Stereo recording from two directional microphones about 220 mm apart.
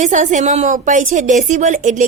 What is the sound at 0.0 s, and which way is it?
A woman's voice, 35° right (ahead or behind).